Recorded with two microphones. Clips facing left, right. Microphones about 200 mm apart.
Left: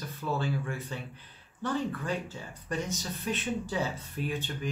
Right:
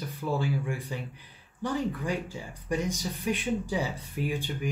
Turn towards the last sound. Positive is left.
turn(degrees=-10)  # may be behind; listen again after turning